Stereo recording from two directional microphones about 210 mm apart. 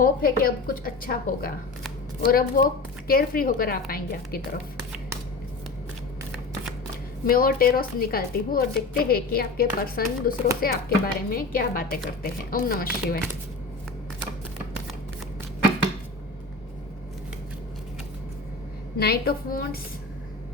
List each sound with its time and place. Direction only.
0.0 s a woman's voice: 45° left (ahead or behind)
7.3 s a woman's voice: 45° left (ahead or behind)
18.9 s a woman's voice: 45° left (ahead or behind)